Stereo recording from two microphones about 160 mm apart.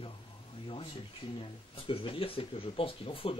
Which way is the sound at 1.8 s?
35° left (ahead or behind).